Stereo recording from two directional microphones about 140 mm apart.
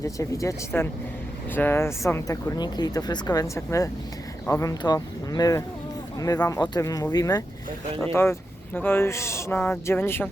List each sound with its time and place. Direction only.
0.0 s speech: 25° left (ahead or behind)
7.9 s speech: 15° left (ahead or behind)